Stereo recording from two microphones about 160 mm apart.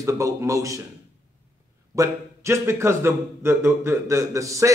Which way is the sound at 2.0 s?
15° right (ahead or behind).